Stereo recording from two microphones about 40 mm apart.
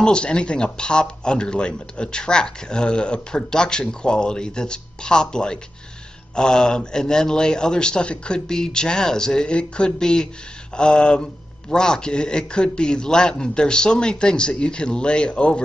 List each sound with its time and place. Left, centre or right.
0.0 s speech: left